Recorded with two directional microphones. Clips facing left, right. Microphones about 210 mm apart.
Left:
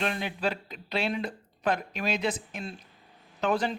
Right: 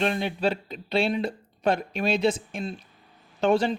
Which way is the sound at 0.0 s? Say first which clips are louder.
Right 5 dB; 30° right (ahead or behind).